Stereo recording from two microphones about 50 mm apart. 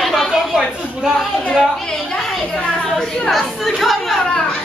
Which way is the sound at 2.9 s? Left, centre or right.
Centre.